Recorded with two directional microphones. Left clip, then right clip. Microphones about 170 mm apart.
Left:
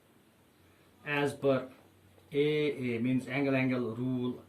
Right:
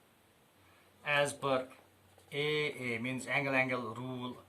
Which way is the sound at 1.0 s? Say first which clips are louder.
Left 2 dB; 30° right (ahead or behind).